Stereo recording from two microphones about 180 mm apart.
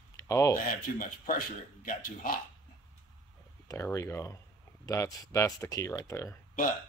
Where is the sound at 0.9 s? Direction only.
50° left (ahead or behind).